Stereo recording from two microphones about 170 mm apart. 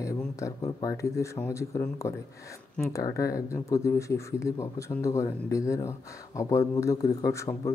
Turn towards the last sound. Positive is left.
turn(degrees=20)  # may be behind; listen again after turning